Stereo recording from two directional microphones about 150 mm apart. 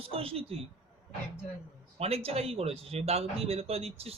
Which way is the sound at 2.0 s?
40° right (ahead or behind).